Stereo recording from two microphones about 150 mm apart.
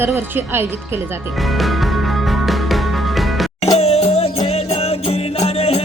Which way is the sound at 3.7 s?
45° left (ahead or behind).